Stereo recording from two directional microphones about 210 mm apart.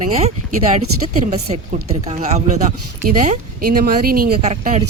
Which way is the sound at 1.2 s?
30° right (ahead or behind).